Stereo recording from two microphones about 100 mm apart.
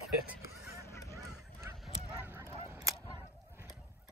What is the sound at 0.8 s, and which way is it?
Honk, 30° left (ahead or behind).